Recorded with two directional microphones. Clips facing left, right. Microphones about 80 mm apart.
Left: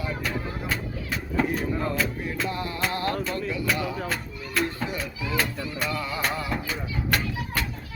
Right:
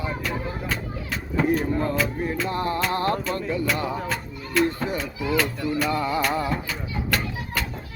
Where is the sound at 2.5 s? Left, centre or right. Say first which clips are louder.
Right 5 dB; right.